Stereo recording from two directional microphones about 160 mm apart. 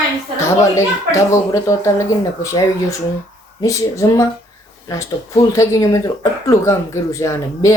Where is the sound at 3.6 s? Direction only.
20° left (ahead or behind).